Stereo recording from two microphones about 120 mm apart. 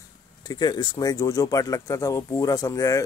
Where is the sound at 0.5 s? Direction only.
35° left (ahead or behind).